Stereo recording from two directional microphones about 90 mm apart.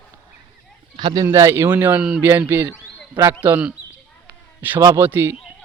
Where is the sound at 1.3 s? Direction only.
30° right (ahead or behind).